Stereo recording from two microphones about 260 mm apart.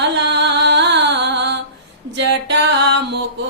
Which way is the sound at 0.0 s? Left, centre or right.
Right.